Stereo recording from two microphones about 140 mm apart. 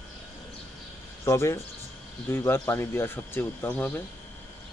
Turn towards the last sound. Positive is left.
turn(degrees=10)  # may be behind; listen again after turning